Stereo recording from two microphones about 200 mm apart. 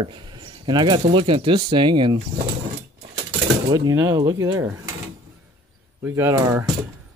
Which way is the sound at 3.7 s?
20° right (ahead or behind).